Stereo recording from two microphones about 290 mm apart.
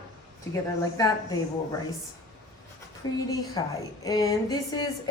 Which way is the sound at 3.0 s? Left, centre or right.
Centre.